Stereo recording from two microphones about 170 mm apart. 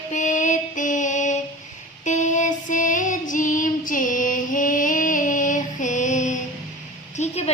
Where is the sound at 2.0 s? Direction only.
45° left (ahead or behind).